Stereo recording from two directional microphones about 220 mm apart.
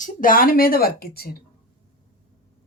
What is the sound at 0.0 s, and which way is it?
A woman's voice, 40° left (ahead or behind).